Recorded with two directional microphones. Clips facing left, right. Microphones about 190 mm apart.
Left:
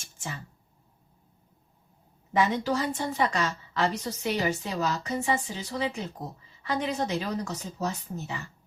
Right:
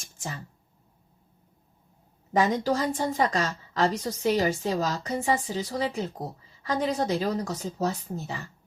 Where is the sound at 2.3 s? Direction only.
40° right (ahead or behind).